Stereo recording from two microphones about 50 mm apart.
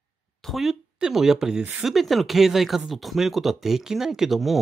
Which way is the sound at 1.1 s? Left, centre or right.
Centre.